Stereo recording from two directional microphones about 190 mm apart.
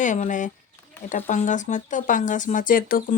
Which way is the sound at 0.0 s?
40° left (ahead or behind).